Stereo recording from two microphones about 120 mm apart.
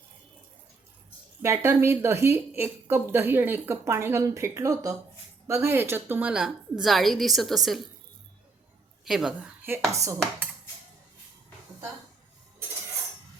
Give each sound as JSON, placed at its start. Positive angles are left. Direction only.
{"t": 1.4, "sound": "a woman's voice", "side_deg": -25}
{"t": 9.0, "sound": "a woman's voice", "side_deg": -5}
{"t": 9.9, "sound": "a woman's voice", "side_deg": -25}